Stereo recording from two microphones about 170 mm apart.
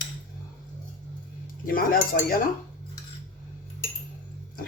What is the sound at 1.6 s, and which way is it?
Cutlery, 55° left (ahead or behind).